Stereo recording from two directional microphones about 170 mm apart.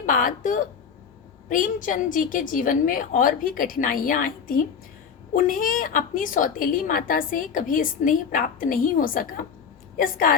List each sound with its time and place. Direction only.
0.0 s a woman's voice: 50° left (ahead or behind)